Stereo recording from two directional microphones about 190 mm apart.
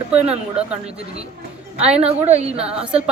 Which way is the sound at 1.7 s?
35° right (ahead or behind).